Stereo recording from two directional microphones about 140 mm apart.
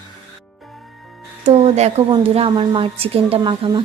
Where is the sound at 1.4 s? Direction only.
50° right (ahead or behind).